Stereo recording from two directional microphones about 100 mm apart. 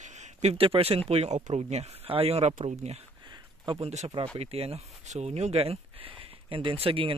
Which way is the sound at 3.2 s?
50° right (ahead or behind).